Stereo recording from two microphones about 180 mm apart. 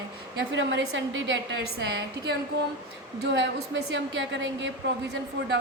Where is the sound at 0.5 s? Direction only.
90° right.